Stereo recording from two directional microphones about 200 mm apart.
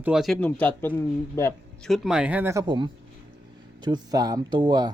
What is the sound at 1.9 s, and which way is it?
Speech, centre (ahead or behind).